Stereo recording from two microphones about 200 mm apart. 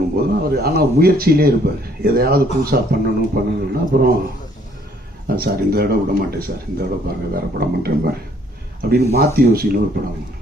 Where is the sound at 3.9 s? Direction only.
50° right (ahead or behind).